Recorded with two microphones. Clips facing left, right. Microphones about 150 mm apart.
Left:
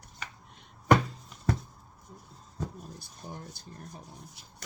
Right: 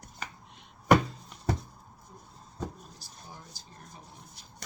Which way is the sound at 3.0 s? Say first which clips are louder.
Left 5 dB; 55° left (ahead or behind).